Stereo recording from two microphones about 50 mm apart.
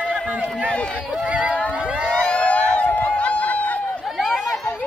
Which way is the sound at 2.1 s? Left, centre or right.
Left.